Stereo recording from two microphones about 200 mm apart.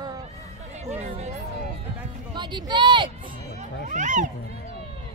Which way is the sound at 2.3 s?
20° right (ahead or behind).